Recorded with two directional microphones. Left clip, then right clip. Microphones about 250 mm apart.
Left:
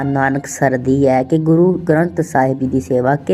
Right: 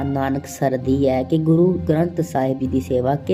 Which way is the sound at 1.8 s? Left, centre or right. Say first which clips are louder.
Left 5 dB; centre.